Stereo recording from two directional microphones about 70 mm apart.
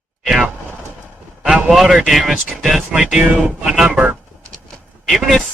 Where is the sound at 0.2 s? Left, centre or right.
Centre.